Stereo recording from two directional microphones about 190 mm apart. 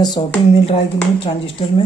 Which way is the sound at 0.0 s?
20° left (ahead or behind).